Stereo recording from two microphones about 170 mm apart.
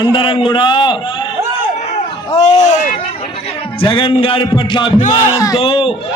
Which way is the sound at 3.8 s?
30° left (ahead or behind).